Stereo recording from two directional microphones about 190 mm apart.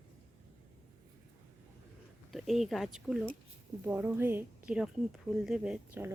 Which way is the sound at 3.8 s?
10° right (ahead or behind).